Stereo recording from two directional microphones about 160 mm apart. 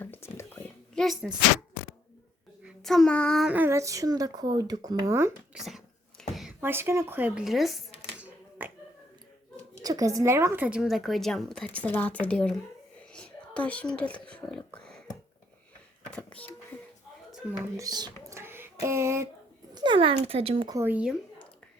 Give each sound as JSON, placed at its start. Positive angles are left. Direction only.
{"t": 0.0, "sound": "whispering", "side_deg": 15}
{"t": 2.6, "sound": "child singing", "side_deg": 0}
{"t": 3.5, "sound": "speech", "side_deg": -15}
{"t": 5.5, "sound": "a sound", "side_deg": 0}
{"t": 6.6, "sound": "speech", "side_deg": -15}
{"t": 8.2, "sound": "typewriter", "side_deg": -10}
{"t": 9.8, "sound": "a woman's voice", "side_deg": -20}
{"t": 13.1, "sound": "a sound", "side_deg": 10}
{"t": 16.0, "sound": "a sound", "side_deg": 5}
{"t": 17.6, "sound": "speech", "side_deg": -20}
{"t": 19.7, "sound": "speech", "side_deg": -30}
{"t": 20.7, "sound": "speech", "side_deg": -15}